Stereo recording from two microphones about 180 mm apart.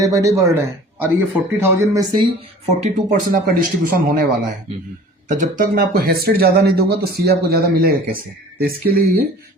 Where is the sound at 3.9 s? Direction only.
50° right (ahead or behind).